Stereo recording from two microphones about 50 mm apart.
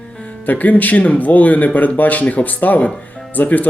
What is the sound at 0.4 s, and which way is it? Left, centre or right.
Speech, left.